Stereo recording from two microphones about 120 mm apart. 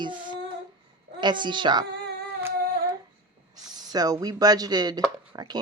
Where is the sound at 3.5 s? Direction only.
30° right (ahead or behind).